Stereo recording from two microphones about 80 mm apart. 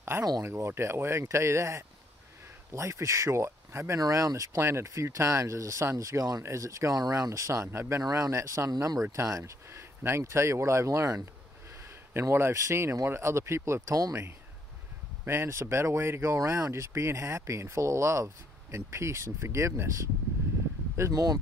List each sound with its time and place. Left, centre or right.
0.4 s speech: right
4.0 s speech: right
4.6 s speech: right
8.0 s speech: right
13.9 s speech: right
15.2 s speech: right
21.1 s speech: right